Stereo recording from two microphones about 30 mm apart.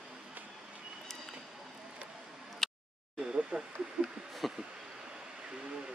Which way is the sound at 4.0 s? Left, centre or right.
Right.